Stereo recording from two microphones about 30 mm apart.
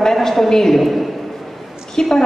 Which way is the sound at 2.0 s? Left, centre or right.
Left.